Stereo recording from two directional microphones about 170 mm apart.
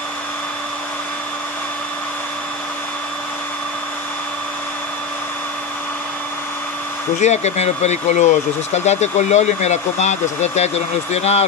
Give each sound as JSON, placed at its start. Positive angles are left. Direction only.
{"t": 7.2, "sound": "speech", "side_deg": 40}